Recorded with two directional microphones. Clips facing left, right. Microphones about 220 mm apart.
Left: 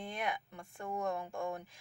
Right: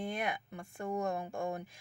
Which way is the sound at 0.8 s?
25° right (ahead or behind).